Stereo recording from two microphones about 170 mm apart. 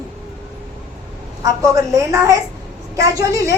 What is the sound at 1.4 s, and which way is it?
A woman's voice, 20° right (ahead or behind).